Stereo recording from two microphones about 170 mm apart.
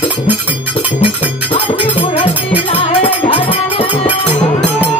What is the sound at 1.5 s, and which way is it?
Music, 30° left (ahead or behind).